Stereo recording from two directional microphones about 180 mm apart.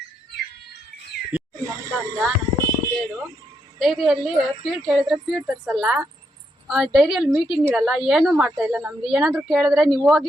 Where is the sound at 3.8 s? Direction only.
Centre (ahead or behind).